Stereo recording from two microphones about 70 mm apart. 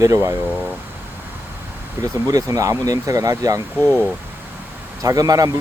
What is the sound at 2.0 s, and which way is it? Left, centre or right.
Speech, right.